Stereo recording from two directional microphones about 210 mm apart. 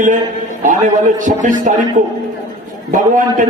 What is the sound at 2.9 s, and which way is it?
Speech, 40° right (ahead or behind).